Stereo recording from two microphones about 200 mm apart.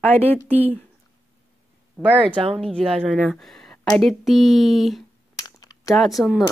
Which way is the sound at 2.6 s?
5° left (ahead or behind).